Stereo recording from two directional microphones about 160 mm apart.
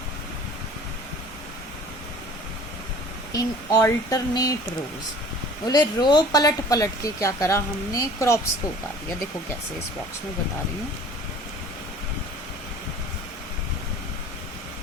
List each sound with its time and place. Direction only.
3.3 s speech: 20° left (ahead or behind)
5.6 s speech: 25° left (ahead or behind)